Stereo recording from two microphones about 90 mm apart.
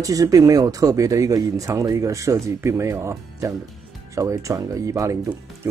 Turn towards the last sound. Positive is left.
turn(degrees=-40)  # may be behind; listen again after turning